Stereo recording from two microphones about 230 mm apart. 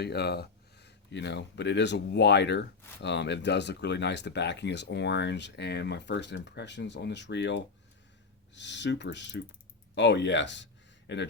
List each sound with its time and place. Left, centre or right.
0.0 s speech: left